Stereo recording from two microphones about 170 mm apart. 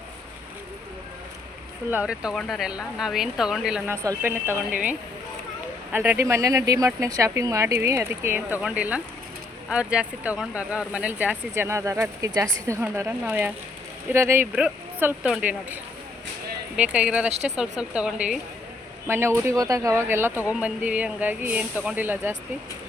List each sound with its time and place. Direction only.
1.9 s speech: 5° right (ahead or behind)